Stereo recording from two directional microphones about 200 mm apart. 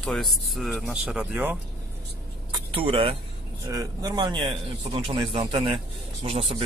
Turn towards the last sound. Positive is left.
turn(degrees=-30)  # may be behind; listen again after turning